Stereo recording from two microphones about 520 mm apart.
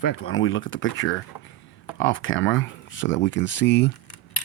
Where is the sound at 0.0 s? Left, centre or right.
Left.